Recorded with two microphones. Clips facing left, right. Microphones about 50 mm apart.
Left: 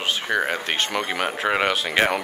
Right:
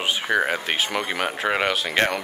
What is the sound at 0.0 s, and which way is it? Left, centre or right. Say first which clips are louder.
Speech: right 1 dB; centre.